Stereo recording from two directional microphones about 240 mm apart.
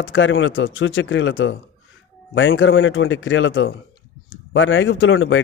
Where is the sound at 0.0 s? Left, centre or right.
Left.